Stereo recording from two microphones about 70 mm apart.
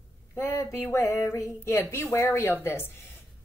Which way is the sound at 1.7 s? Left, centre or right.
Left.